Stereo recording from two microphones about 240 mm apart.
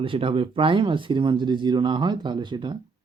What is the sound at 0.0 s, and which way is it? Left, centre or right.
Speech, right.